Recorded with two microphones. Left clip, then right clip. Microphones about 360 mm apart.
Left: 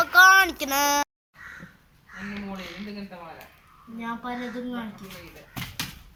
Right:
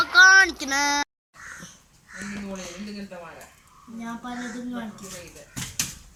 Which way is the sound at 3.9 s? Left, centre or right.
Centre.